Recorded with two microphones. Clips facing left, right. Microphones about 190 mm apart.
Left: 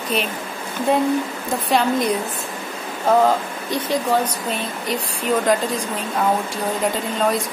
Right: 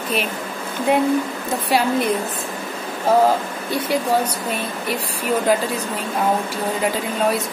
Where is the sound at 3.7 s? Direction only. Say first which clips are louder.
Even; 10° right (ahead or behind).